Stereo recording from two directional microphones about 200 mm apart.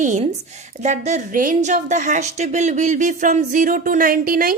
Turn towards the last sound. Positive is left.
turn(degrees=-45)  # may be behind; listen again after turning